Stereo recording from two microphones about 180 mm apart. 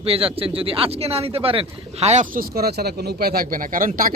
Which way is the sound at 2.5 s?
60° right (ahead or behind).